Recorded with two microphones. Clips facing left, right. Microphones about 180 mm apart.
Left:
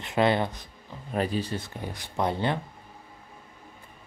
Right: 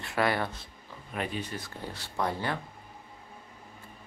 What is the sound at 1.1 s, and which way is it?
Speech, 35° left (ahead or behind).